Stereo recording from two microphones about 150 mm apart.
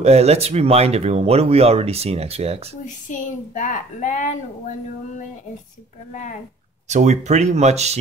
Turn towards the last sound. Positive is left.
turn(degrees=-45)  # may be behind; listen again after turning